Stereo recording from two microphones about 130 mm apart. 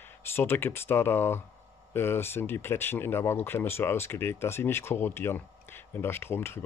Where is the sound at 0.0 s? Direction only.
15° left (ahead or behind).